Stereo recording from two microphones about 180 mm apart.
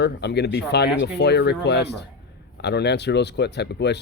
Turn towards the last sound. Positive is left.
turn(degrees=70)  # may be behind; listen again after turning